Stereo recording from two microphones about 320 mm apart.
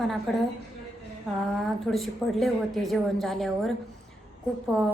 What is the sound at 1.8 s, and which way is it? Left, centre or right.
A woman's voice, centre.